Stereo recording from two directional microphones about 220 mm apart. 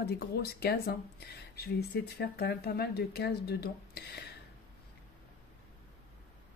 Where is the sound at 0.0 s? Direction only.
45° left (ahead or behind).